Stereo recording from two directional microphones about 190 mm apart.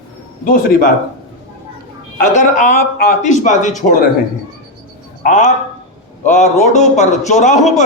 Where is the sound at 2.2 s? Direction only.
40° left (ahead or behind).